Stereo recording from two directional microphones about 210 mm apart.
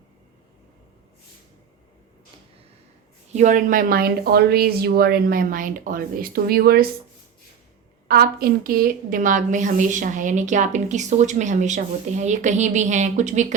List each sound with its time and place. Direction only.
3.3 s speech: 35° right (ahead or behind)
8.0 s a woman's voice: 45° right (ahead or behind)